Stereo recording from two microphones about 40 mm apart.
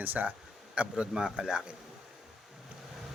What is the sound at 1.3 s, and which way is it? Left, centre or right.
Speech, centre.